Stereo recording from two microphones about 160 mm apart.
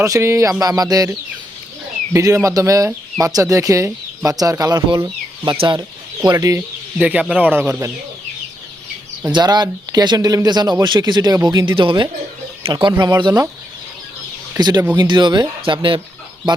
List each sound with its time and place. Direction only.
0.0 s speech: 20° right (ahead or behind)
2.1 s speech: 20° right (ahead or behind)
6.2 s speech: 20° right (ahead or behind)
7.0 s speech: 5° right (ahead or behind)
9.2 s speech: 25° right (ahead or behind)
14.9 s speech: 30° right (ahead or behind)